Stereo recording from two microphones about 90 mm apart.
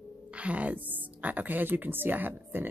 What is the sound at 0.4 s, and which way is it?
Speech, 15° right (ahead or behind).